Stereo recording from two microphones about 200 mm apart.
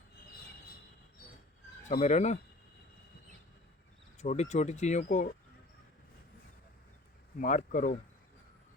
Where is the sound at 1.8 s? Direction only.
35° left (ahead or behind).